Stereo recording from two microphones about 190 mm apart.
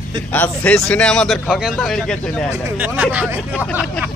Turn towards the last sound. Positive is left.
turn(degrees=5)  # may be behind; listen again after turning